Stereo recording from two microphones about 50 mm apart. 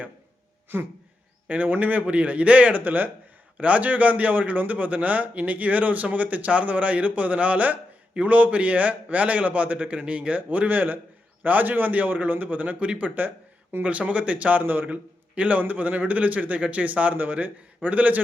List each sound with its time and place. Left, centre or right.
0.7 s a sound: right
1.5 s a man's voice: right
13.1 s speech: right
13.8 s a man's voice: right
14.6 s a man's voice: right
15.4 s a man's voice: right